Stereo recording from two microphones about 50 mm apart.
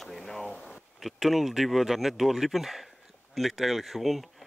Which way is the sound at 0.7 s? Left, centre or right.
Centre.